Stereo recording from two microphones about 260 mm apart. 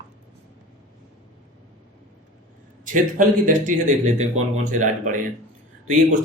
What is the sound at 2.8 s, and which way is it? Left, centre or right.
A man's voice, right.